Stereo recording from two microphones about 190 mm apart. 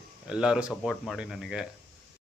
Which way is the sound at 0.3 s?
5° right (ahead or behind).